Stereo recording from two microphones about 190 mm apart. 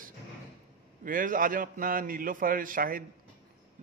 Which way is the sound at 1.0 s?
45° right (ahead or behind).